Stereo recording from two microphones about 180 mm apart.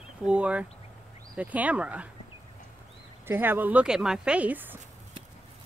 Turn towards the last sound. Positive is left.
turn(degrees=-10)  # may be behind; listen again after turning